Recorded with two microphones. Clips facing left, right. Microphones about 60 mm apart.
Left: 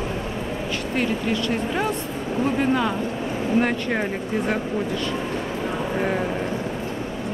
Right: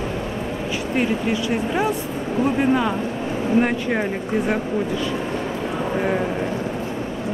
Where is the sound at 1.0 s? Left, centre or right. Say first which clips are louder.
Right 2 dB; centre.